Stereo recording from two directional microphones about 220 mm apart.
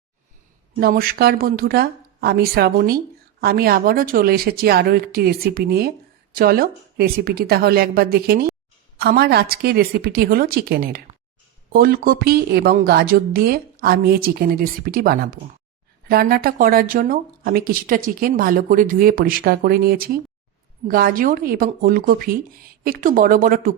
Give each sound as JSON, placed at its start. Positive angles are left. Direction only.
{"t": 0.8, "sound": "a woman's voice", "side_deg": -40}